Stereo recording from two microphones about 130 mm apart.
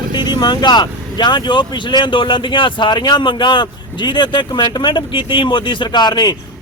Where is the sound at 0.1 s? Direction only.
35° left (ahead or behind).